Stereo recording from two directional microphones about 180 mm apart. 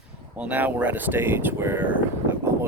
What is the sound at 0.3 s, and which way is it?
Speech, 10° right (ahead or behind).